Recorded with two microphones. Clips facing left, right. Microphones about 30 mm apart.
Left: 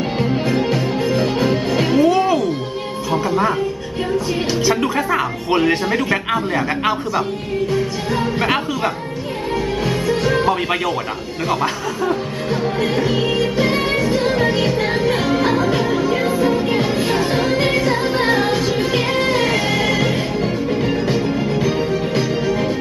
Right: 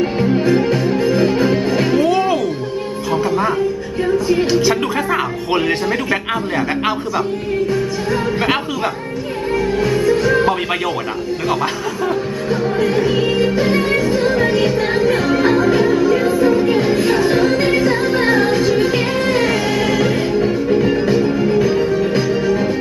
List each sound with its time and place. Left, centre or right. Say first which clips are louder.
1.1 s music: right 2 dB; centre
4.7 s speech: even; centre
8.4 s speech: right 1 dB; centre
10.4 s speech: right 1 dB; centre
12.5 s music: right 2 dB; left
13.7 s music: right 2 dB; left
18.4 s music: right 4 dB; left
21.8 s music: right 3 dB; left